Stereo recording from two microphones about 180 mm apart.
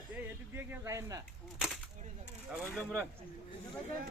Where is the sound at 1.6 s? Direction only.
Centre (ahead or behind).